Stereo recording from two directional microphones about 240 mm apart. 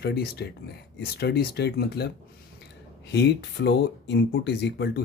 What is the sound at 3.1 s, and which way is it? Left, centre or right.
Speech, left.